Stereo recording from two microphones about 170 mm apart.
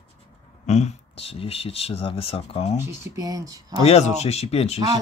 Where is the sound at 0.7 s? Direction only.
40° left (ahead or behind).